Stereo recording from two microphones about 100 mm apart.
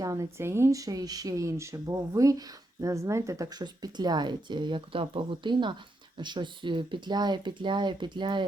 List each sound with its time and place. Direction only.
0.0 s speech: 30° right (ahead or behind)
3.6 s speech: 45° right (ahead or behind)